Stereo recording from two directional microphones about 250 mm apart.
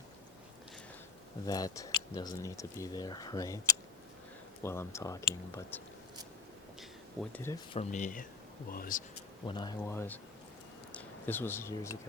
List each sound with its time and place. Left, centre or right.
1.5 s speech: centre
4.6 s speech: centre
7.2 s speech: centre
7.7 s speech: left
9.5 s speech: centre